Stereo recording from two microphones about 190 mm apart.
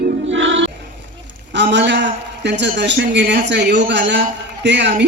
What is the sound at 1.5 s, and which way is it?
A man's voice, 65° right (ahead or behind).